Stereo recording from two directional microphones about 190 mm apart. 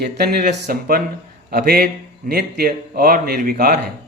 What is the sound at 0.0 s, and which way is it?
A man's voice, 55° right (ahead or behind).